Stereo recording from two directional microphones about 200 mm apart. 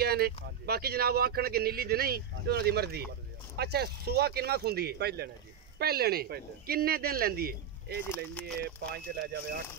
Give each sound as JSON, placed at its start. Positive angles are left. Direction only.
{"t": 0.0, "sound": "speech", "side_deg": -50}